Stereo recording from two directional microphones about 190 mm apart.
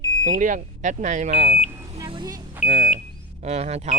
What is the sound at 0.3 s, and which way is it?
Speech, 45° right (ahead or behind).